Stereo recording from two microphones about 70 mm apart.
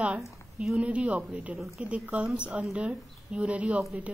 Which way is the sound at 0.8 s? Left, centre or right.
Centre.